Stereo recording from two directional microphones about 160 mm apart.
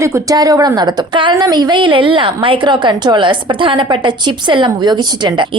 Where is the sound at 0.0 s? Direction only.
20° right (ahead or behind).